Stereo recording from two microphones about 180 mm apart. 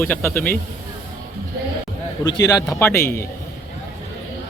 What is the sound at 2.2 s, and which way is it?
Speech, 20° left (ahead or behind).